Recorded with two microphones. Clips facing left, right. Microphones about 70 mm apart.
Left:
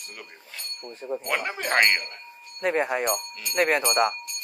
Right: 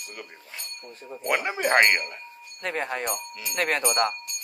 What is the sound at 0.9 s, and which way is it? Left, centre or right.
Speech, left.